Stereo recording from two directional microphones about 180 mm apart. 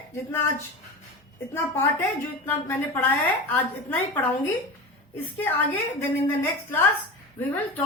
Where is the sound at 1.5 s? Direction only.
15° left (ahead or behind).